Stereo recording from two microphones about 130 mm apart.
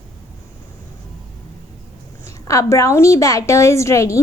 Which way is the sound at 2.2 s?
25° left (ahead or behind).